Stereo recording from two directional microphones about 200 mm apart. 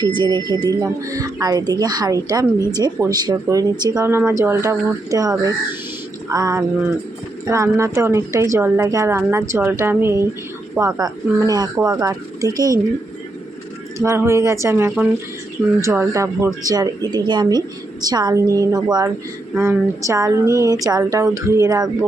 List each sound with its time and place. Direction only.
0.0 s speech: 25° right (ahead or behind)
14.0 s speech: 15° right (ahead or behind)